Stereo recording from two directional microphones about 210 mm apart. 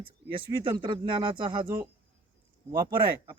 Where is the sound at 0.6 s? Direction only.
25° right (ahead or behind).